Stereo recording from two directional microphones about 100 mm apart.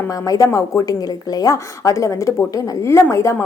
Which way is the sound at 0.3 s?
35° left (ahead or behind).